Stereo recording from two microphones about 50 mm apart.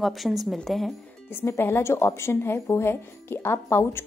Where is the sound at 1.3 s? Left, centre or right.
Left.